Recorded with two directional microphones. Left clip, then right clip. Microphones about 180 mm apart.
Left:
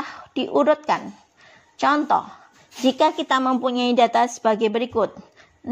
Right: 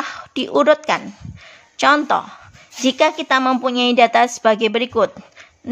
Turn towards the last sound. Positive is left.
turn(degrees=-20)  # may be behind; listen again after turning